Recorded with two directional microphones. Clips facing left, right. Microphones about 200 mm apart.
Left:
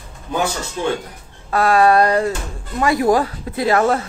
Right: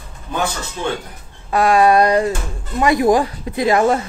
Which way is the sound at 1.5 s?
15° right (ahead or behind).